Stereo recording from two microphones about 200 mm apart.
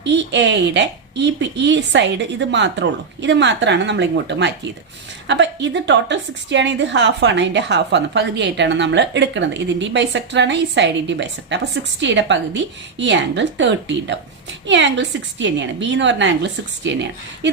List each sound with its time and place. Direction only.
0.0 s a woman's voice: 60° right (ahead or behind)